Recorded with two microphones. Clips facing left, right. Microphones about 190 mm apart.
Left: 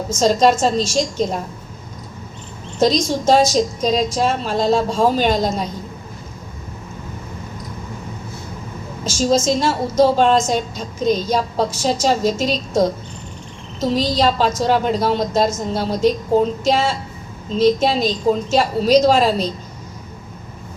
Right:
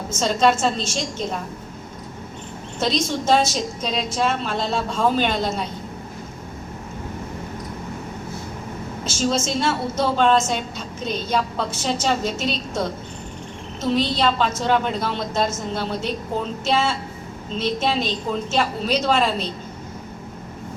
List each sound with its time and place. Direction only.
0.2 s a woman's voice: 40° left (ahead or behind)
2.7 s a woman's voice: 40° left (ahead or behind)
9.0 s a woman's voice: 35° left (ahead or behind)